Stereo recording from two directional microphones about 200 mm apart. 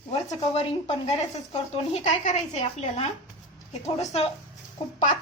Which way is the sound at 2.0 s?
40° left (ahead or behind).